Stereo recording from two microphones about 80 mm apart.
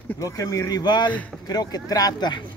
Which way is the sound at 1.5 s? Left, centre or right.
Left.